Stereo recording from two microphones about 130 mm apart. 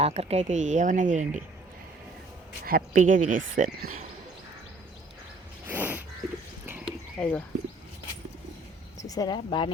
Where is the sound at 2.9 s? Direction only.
90° right.